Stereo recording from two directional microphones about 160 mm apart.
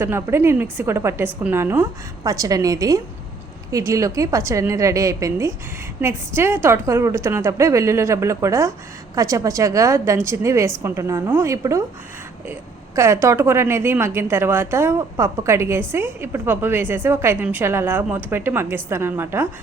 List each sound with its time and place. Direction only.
0.0 s a woman's voice: 15° right (ahead or behind)
13.0 s a woman's voice: 20° right (ahead or behind)